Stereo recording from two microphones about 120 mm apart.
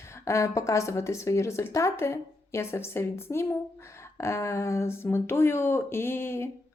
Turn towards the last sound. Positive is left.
turn(degrees=20)  # may be behind; listen again after turning